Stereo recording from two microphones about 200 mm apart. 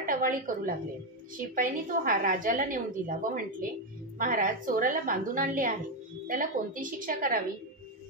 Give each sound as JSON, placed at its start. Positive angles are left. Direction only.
{"t": 0.0, "sound": "a woman's voice", "side_deg": -45}